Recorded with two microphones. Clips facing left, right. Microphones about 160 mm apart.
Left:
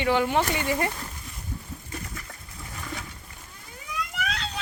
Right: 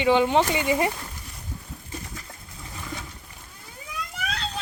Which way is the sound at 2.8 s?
Centre (ahead or behind).